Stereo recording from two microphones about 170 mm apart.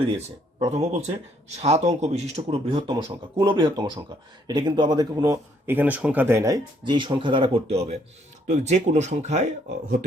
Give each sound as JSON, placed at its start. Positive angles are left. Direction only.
{"t": 0.7, "sound": "speech", "side_deg": -40}